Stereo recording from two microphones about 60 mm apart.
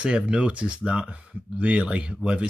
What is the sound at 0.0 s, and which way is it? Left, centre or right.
Speech, centre.